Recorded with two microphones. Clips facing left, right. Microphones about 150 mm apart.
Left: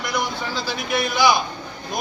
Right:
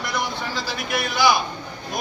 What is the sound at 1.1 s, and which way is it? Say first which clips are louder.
Speech: left 1 dB; 20° left (ahead or behind).